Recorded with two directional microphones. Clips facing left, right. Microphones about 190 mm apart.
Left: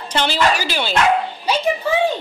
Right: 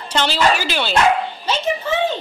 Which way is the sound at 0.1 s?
15° left (ahead or behind).